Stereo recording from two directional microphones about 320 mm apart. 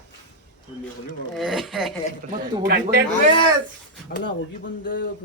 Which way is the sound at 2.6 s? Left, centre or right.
Right.